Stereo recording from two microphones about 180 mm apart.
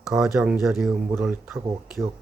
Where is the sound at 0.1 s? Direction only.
5° right (ahead or behind).